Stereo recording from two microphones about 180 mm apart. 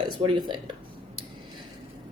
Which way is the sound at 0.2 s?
25° right (ahead or behind).